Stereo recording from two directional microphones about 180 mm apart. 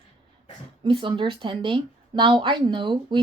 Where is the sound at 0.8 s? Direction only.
30° right (ahead or behind).